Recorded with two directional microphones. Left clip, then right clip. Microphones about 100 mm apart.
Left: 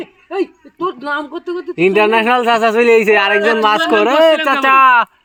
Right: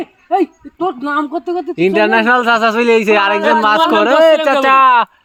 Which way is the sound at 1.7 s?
35° right (ahead or behind).